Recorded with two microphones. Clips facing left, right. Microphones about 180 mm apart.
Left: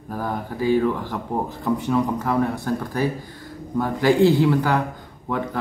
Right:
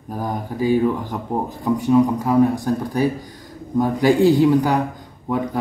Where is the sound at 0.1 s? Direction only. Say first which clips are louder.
Right 2 dB; 15° right (ahead or behind).